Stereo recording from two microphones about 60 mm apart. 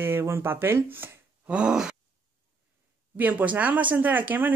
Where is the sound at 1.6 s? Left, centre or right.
Centre.